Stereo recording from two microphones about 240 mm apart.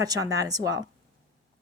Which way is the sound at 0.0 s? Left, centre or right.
Centre.